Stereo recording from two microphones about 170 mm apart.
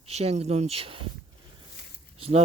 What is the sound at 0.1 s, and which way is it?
Speech, 40° right (ahead or behind).